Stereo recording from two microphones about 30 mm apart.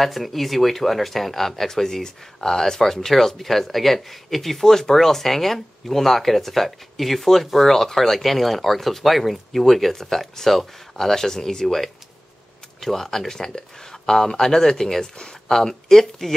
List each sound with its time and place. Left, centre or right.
0.0 s speech: centre
14.1 s speech: left
14.4 s speech: centre